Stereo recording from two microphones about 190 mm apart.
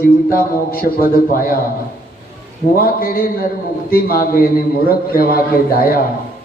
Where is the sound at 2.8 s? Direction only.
50° left (ahead or behind).